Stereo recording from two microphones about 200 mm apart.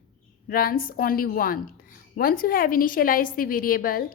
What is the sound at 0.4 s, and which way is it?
A woman's voice, 45° left (ahead or behind).